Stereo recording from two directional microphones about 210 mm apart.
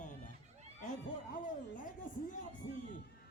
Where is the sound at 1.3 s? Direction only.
40° left (ahead or behind).